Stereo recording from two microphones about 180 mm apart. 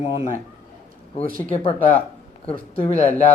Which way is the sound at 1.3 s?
50° right (ahead or behind).